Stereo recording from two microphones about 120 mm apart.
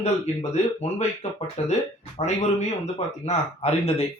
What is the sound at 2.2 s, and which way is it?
Speech, 55° left (ahead or behind).